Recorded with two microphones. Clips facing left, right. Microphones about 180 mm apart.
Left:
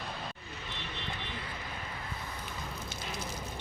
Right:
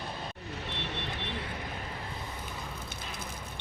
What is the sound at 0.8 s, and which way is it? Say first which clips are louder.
Vehicle: right 2 dB; 65° right (ahead or behind).